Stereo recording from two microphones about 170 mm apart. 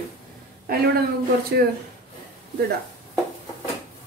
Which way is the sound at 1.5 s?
75° right (ahead or behind).